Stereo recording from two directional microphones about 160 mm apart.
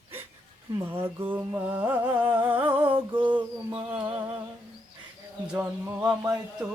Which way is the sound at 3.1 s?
10° right (ahead or behind).